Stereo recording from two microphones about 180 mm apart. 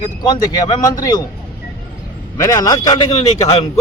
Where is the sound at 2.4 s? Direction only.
20° left (ahead or behind).